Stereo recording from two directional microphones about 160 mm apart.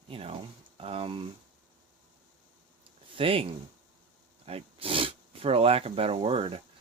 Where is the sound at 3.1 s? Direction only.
35° right (ahead or behind).